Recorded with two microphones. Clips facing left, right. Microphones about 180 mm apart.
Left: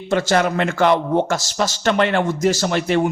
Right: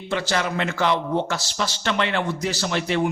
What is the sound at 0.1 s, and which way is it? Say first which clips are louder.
A man's voice: left 7 dB; 45° left (ahead or behind).